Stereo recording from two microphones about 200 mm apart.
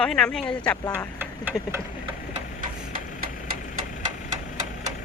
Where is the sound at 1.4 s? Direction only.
10° right (ahead or behind).